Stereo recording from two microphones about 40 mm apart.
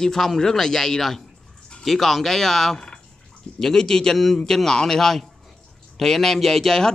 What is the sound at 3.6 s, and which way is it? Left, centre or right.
Speech, centre.